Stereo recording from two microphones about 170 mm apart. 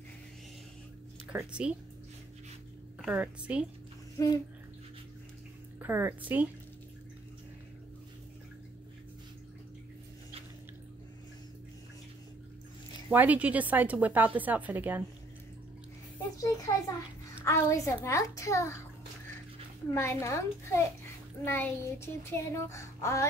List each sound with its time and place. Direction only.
1.3 s a woman's voice: 5° right (ahead or behind)
3.0 s a woman's voice: 5° right (ahead or behind)
4.2 s a child's voice: 20° left (ahead or behind)
5.8 s a woman's voice: 10° right (ahead or behind)
13.1 s a woman's voice: 10° right (ahead or behind)
16.3 s a child's voice: 20° left (ahead or behind)
17.5 s child singing: 15° left (ahead or behind)
19.9 s child singing: 15° left (ahead or behind)